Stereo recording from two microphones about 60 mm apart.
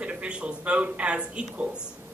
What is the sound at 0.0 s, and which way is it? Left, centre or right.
Speech, centre.